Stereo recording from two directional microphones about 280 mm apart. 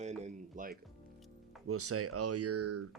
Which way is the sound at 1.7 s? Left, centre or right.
Right.